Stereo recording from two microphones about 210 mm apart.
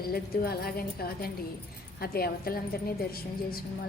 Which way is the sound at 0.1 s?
45° left (ahead or behind).